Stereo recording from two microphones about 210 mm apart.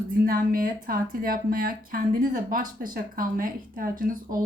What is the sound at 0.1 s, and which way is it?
A woman's voice, 40° right (ahead or behind).